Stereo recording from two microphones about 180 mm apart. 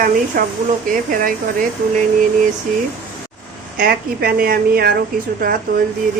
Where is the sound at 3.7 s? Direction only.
55° right (ahead or behind).